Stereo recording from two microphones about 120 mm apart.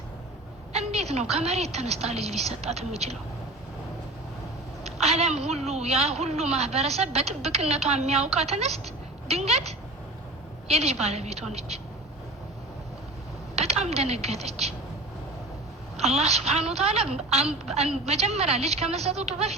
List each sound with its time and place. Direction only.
0.7 s a woman's voice: 60° right (ahead or behind)
4.8 s a woman's voice: 60° right (ahead or behind)
13.6 s a woman's voice: 60° right (ahead or behind)
16.0 s a woman's voice: 60° right (ahead or behind)